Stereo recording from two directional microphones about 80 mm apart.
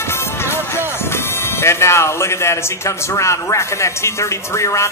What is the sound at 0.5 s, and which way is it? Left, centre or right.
Speech, left.